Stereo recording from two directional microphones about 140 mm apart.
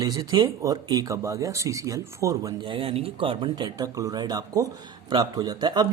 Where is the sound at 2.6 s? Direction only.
35° right (ahead or behind).